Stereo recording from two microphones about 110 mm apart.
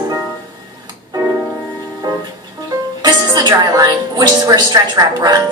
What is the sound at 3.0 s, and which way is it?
A woman's voice, 40° right (ahead or behind).